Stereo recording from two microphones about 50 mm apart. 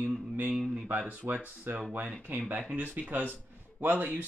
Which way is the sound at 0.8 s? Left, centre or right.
Right.